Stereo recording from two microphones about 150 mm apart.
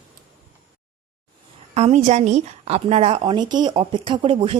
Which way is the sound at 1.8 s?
50° right (ahead or behind).